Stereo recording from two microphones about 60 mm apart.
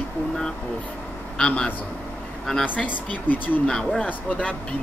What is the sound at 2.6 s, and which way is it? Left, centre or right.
Speech, left.